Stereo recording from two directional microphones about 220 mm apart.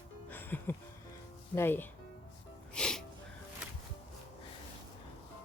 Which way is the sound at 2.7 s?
5° left (ahead or behind).